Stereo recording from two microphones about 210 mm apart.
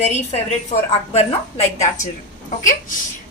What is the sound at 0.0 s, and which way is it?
Speech, 30° left (ahead or behind).